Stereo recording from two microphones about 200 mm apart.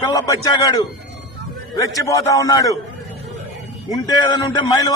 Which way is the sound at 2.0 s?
15° left (ahead or behind).